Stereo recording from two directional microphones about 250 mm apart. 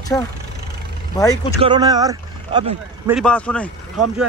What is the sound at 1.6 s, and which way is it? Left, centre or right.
Speech, centre.